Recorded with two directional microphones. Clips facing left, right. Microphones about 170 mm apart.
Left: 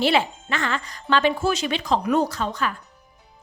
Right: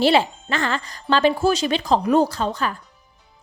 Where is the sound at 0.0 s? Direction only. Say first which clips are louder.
Right 3 dB; 35° right (ahead or behind).